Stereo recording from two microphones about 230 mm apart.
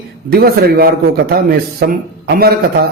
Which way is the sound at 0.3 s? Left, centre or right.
Right.